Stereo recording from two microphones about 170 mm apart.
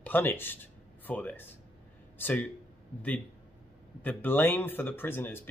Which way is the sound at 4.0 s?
10° left (ahead or behind).